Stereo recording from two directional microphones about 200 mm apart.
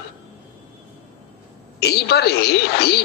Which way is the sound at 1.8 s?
55° left (ahead or behind).